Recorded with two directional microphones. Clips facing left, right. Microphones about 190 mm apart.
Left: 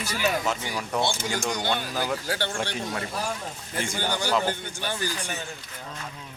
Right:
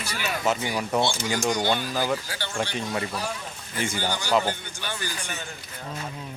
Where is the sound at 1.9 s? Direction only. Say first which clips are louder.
Right 2 dB; centre (ahead or behind).